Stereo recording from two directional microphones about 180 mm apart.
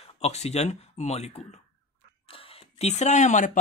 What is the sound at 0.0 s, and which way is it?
Speech, 35° left (ahead or behind).